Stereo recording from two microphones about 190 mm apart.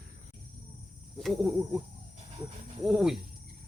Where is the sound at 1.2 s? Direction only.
Centre (ahead or behind).